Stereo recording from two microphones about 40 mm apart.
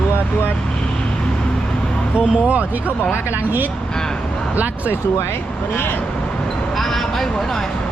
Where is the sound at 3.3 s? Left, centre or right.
Right.